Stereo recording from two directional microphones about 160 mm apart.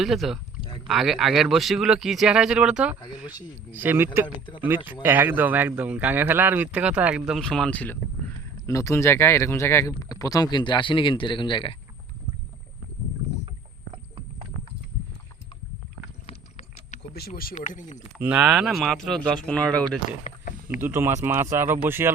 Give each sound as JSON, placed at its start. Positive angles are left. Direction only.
{"t": 0.0, "sound": "a man's voice", "side_deg": 0}
{"t": 3.0, "sound": "speech", "side_deg": 25}
{"t": 3.7, "sound": "speech", "side_deg": -10}
{"t": 4.4, "sound": "speech", "side_deg": 30}
{"t": 5.0, "sound": "speech", "side_deg": -10}
{"t": 13.9, "sound": "horse", "side_deg": -30}
{"t": 16.2, "sound": "a sound", "side_deg": 45}
{"t": 17.0, "sound": "speech", "side_deg": 75}
{"t": 17.5, "sound": "speech", "side_deg": 50}
{"t": 18.2, "sound": "a man's voice", "side_deg": -10}
{"t": 20.2, "sound": "a sound", "side_deg": 60}
{"t": 20.8, "sound": "speech", "side_deg": -15}